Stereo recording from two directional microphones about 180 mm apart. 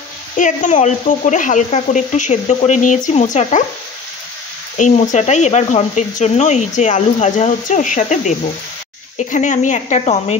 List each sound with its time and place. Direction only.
0.4 s speech: 45° left (ahead or behind)
4.7 s speech: 45° left (ahead or behind)